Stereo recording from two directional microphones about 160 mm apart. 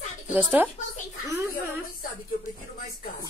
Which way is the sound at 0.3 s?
10° right (ahead or behind).